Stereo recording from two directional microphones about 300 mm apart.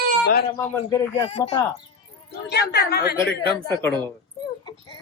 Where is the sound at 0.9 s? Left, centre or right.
Centre.